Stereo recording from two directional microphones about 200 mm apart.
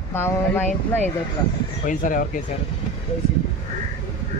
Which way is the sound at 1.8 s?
40° left (ahead or behind).